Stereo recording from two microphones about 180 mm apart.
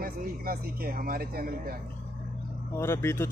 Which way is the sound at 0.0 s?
55° right (ahead or behind).